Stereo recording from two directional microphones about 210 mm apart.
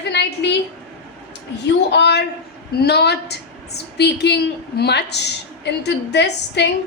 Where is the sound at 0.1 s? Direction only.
55° left (ahead or behind).